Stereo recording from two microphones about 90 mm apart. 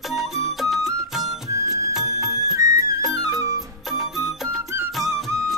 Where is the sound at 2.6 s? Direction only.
40° right (ahead or behind).